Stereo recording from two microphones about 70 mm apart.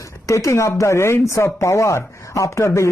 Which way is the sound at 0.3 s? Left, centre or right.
Left.